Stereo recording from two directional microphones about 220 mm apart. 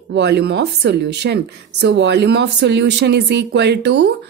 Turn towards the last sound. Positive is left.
turn(degrees=-50)  # may be behind; listen again after turning